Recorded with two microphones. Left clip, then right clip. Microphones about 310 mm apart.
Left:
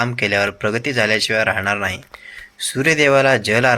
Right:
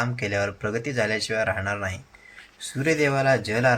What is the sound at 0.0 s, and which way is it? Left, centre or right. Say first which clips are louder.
Speech: left 8 dB; left.